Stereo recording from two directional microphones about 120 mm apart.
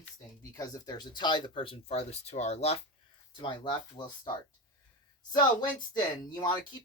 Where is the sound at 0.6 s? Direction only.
30° left (ahead or behind); by 2.8 s 60° left (ahead or behind).